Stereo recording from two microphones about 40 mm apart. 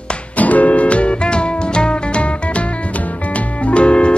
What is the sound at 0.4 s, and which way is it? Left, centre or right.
Music, left.